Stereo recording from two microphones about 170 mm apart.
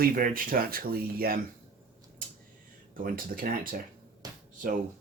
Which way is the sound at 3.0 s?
55° right (ahead or behind).